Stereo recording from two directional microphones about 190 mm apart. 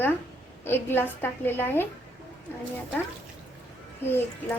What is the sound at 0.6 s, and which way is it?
A woman's voice, 10° left (ahead or behind).